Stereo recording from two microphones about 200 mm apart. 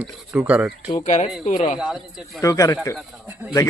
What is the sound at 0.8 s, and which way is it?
Speech, 35° left (ahead or behind).